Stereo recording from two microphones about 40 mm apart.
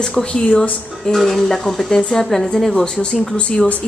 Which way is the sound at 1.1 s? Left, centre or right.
Centre.